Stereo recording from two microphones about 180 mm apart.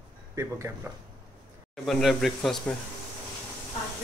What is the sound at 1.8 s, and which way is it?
Speech, centre (ahead or behind).